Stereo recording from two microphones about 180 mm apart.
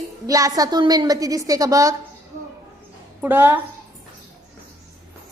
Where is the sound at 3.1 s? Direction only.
10° right (ahead or behind).